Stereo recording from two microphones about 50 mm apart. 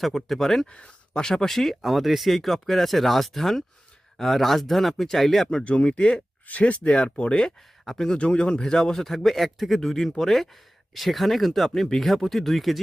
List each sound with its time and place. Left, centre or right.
0.0 s a man's voice: centre
5.5 s a man's voice: left; by 12.8 s centre